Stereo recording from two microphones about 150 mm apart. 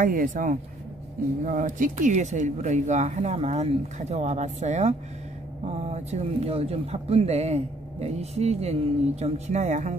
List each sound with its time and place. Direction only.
0.0 s speech: 65° right (ahead or behind)